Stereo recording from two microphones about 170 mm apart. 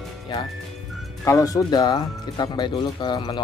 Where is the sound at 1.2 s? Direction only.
20° left (ahead or behind).